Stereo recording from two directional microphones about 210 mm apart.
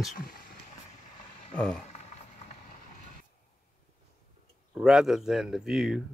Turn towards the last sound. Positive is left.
turn(degrees=0)  # may be behind; listen again after turning